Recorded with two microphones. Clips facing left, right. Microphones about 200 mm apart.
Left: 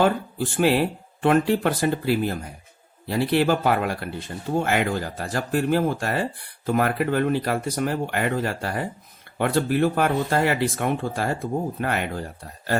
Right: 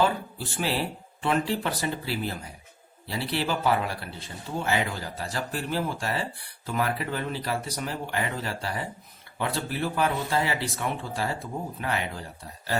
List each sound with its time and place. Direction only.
0.0 s speech: 55° left (ahead or behind)